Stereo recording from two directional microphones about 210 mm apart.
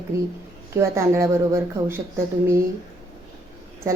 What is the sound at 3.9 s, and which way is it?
Speech, 15° right (ahead or behind).